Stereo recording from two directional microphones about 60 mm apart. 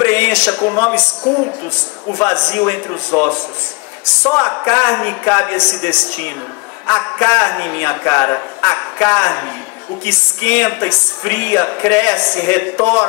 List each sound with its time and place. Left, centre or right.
0.0 s speech: left
2.1 s a man's voice: left